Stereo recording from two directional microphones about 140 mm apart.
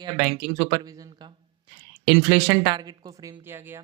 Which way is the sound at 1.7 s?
35° right (ahead or behind).